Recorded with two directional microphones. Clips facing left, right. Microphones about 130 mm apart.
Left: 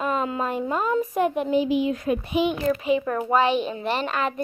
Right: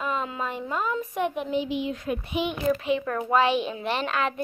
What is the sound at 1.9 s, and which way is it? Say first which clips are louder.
Speech: left 5 dB; 45° left (ahead or behind).